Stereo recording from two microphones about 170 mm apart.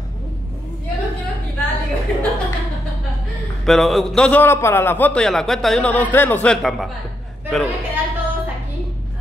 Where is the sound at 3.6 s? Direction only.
Centre (ahead or behind).